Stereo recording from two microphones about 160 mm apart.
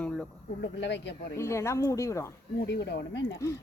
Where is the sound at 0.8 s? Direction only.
90° left.